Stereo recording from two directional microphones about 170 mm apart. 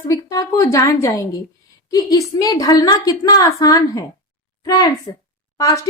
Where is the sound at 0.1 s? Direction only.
20° left (ahead or behind).